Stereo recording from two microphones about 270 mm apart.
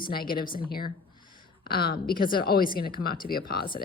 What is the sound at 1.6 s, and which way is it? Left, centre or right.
A woman's voice, left.